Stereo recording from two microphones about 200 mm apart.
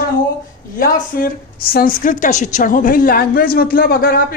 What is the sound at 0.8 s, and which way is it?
A woman's voice, 45° left (ahead or behind).